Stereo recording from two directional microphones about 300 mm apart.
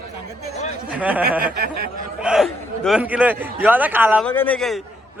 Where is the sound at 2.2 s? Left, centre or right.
Centre.